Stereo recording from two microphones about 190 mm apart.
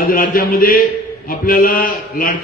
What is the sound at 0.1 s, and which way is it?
A man's voice, 50° left (ahead or behind).